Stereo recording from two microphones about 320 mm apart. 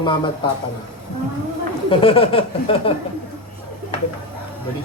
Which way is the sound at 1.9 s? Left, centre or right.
Centre.